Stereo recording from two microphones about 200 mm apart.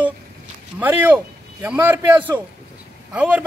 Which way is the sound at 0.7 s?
10° right (ahead or behind).